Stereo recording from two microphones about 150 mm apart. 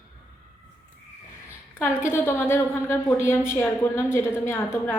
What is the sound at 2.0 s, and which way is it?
A woman's voice, 15° left (ahead or behind).